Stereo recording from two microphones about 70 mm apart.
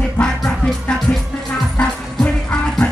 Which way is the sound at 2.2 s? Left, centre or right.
Centre.